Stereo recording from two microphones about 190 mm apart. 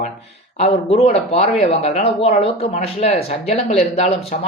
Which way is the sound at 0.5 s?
30° left (ahead or behind).